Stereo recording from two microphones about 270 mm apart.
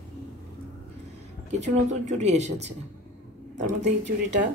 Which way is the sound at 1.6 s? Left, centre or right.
Right.